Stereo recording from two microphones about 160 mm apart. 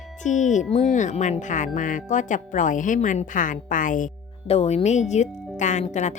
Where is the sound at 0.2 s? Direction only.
50° left (ahead or behind).